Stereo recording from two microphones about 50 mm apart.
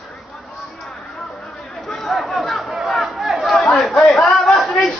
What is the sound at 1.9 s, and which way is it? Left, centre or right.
Crowd, centre.